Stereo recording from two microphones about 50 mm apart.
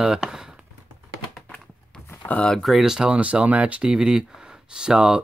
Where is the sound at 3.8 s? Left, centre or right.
Centre.